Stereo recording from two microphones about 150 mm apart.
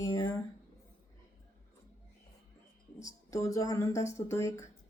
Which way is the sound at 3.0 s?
20° left (ahead or behind).